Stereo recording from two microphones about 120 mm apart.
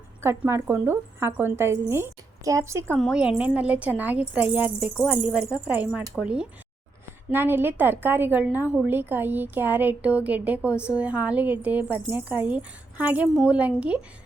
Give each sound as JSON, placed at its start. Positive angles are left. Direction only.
{"t": 0.2, "sound": "a woman's voice", "side_deg": -20}
{"t": 3.0, "sound": "a woman's voice", "side_deg": -5}